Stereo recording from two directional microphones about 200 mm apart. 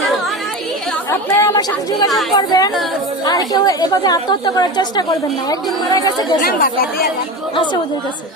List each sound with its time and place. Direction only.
1.1 s a woman's voice: 15° left (ahead or behind)
6.4 s speech: 45° left (ahead or behind)
7.5 s a woman's voice: 25° left (ahead or behind)